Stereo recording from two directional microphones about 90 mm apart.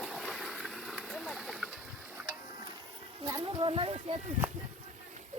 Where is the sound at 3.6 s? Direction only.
85° right.